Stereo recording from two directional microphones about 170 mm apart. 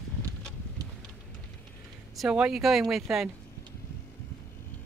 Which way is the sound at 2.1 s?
5° right (ahead or behind).